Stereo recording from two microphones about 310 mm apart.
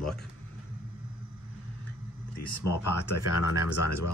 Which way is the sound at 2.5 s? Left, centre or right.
Left.